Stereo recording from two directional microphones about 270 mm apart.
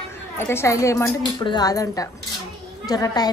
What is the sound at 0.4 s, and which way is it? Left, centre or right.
A woman's voice, centre.